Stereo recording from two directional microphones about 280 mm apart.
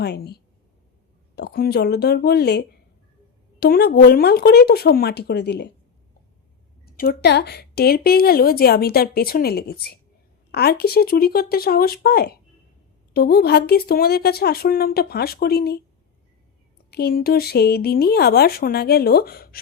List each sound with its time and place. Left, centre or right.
0.0 s a woman's voice: left
6.8 s a woman's voice: left
16.9 s a woman's voice: left